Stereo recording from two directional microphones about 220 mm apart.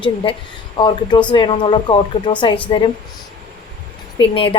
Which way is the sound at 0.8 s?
20° left (ahead or behind).